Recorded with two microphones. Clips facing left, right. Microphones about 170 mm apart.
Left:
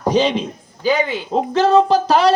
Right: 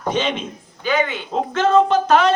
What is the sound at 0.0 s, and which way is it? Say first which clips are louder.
A man's voice: left 5 dB; 35° left (ahead or behind).